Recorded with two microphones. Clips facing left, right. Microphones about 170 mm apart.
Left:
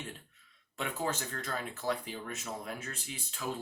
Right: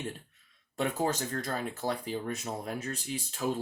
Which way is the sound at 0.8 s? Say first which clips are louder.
Right 5 dB; 40° right (ahead or behind).